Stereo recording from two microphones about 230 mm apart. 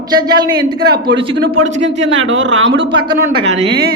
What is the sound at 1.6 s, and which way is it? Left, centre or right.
Speech, right.